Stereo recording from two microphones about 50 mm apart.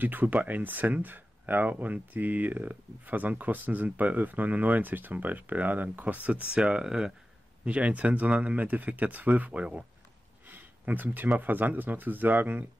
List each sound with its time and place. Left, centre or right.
0.0 s speech: right
6.6 s speech: centre
7.6 s speech: right